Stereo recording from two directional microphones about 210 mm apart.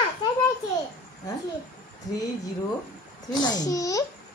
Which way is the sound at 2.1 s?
15° left (ahead or behind).